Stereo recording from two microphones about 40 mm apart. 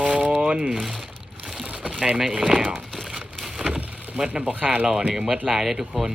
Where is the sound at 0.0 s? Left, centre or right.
Right.